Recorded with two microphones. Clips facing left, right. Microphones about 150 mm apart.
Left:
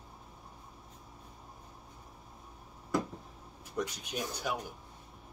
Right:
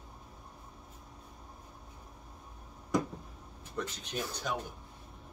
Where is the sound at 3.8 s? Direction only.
10° left (ahead or behind).